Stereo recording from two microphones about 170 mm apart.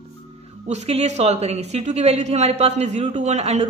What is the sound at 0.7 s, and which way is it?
A woman's voice, 40° right (ahead or behind).